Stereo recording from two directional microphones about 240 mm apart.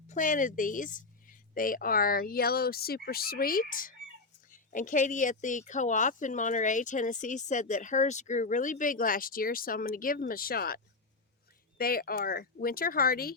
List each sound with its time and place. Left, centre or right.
0.1 s speech: left
11.8 s speech: left